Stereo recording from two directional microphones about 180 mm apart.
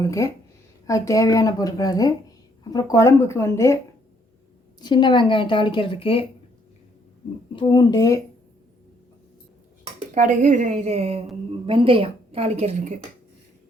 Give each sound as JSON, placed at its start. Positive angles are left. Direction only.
{"t": 0.0, "sound": "a woman's voice", "side_deg": 15}
{"t": 4.8, "sound": "a woman's voice", "side_deg": 25}
{"t": 7.5, "sound": "a woman's voice", "side_deg": 25}
{"t": 9.8, "sound": "a woman's voice", "side_deg": -45}